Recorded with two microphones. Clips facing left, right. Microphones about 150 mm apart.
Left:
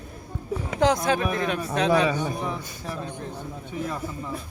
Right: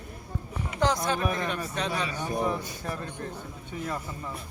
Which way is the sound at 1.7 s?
90° left.